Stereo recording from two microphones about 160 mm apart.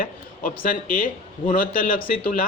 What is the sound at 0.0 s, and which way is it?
Speech, 60° left (ahead or behind).